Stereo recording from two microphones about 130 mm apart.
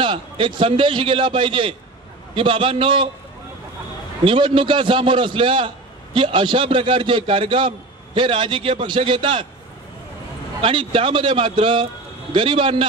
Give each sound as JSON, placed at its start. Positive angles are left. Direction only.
{"t": 0.0, "sound": "a man's voice", "side_deg": -40}
{"t": 4.2, "sound": "a man's voice", "side_deg": -40}
{"t": 10.6, "sound": "a man's voice", "side_deg": -40}